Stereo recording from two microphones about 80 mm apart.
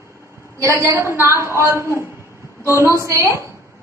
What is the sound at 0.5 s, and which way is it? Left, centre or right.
Speech, right.